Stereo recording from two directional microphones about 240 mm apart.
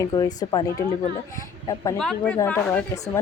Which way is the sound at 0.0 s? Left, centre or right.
Centre.